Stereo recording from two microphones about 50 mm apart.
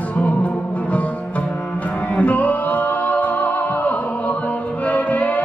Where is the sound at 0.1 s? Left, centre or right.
Left.